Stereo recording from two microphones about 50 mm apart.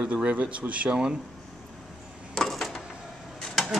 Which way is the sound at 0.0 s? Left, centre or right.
Right.